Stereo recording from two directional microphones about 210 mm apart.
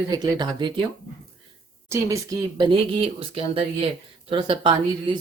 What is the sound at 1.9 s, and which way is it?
Speech, 15° right (ahead or behind).